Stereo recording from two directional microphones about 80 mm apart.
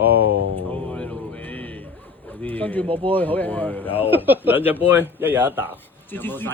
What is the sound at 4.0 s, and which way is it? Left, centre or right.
Speech, right.